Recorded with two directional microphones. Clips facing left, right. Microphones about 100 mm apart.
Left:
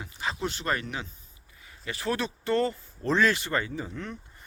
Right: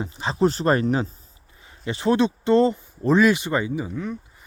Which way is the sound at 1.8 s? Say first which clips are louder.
Right 10 dB; 25° right (ahead or behind).